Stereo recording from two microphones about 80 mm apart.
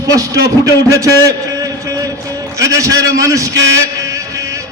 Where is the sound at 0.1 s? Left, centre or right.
Right.